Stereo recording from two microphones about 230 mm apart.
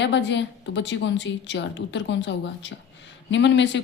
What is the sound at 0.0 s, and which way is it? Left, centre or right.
A woman's voice, left.